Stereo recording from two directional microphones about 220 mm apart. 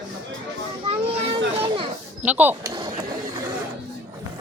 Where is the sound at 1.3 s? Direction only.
25° right (ahead or behind).